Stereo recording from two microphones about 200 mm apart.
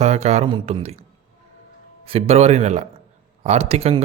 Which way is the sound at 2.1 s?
30° right (ahead or behind).